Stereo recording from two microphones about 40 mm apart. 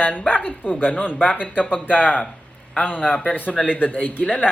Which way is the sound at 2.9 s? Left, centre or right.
Centre.